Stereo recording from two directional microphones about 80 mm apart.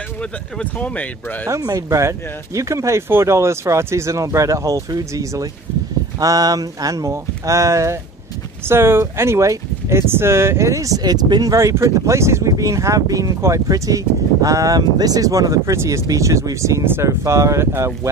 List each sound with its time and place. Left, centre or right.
0.2 s speech: centre
1.6 s speech: right
1.9 s speech: right
11.5 s speech: right